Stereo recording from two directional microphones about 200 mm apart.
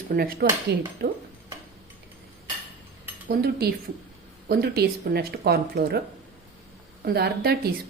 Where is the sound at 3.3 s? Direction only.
50° right (ahead or behind).